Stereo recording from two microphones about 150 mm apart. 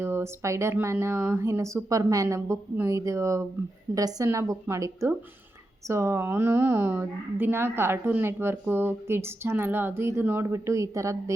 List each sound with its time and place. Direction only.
0.0 s a woman's voice: 15° right (ahead or behind)